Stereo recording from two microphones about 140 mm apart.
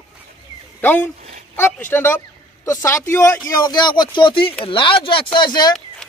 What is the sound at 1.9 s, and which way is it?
Speech, 15° left (ahead or behind).